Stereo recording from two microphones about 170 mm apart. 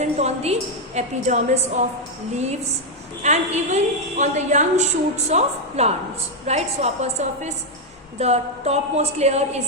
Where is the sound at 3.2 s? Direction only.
45° right (ahead or behind).